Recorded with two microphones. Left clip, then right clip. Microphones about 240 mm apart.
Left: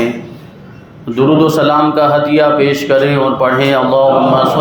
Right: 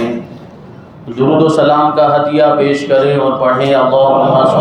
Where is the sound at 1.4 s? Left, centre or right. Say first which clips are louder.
Right 3 dB; left.